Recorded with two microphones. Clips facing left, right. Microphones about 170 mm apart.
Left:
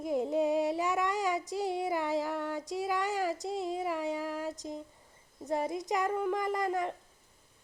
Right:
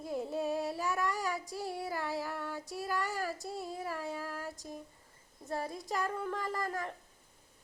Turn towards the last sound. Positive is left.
turn(degrees=20)  # may be behind; listen again after turning